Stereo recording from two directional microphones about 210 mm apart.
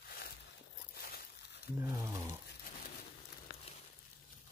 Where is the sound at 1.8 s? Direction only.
15° right (ahead or behind).